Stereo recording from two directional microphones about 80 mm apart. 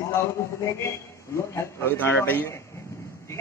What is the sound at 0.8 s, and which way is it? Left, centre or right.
A man's voice, left.